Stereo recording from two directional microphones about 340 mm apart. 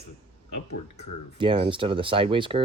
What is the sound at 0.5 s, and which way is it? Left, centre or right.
Speech, left.